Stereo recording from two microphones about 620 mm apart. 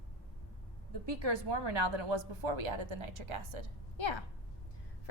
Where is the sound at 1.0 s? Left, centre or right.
Right.